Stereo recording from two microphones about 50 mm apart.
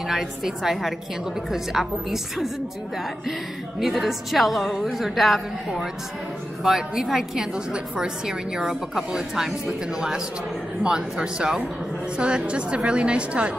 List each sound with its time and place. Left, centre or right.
0.1 s a woman's voice: centre
3.8 s a woman's voice: centre
6.6 s a woman's voice: centre